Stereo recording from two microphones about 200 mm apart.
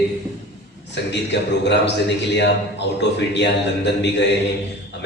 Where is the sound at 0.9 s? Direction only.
60° left (ahead or behind).